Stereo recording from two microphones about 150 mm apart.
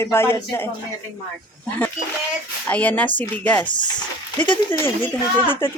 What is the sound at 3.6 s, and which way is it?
Speech, 30° left (ahead or behind).